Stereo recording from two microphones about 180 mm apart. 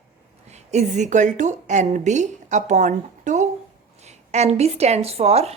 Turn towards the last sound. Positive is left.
turn(degrees=-35)  # may be behind; listen again after turning